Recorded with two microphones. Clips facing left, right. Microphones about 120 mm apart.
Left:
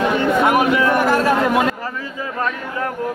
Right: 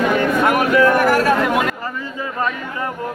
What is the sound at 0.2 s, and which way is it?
Chatter, 20° left (ahead or behind).